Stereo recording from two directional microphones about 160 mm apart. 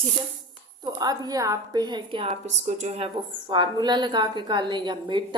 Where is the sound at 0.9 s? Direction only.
25° right (ahead or behind).